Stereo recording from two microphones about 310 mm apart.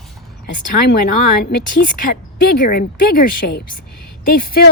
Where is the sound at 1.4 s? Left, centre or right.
Left.